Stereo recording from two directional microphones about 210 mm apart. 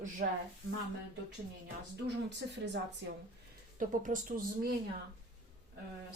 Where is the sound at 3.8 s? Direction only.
40° right (ahead or behind).